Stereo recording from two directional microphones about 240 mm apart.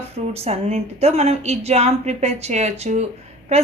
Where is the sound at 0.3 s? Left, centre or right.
Right.